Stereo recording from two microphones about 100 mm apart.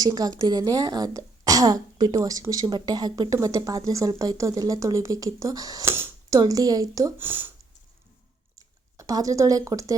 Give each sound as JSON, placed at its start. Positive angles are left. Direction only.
{"t": 0.0, "sound": "speech", "side_deg": -40}
{"t": 5.8, "sound": "speech", "side_deg": -25}
{"t": 6.3, "sound": "speech", "side_deg": -40}
{"t": 7.2, "sound": "speech", "side_deg": -20}
{"t": 8.5, "sound": "a sound", "side_deg": -35}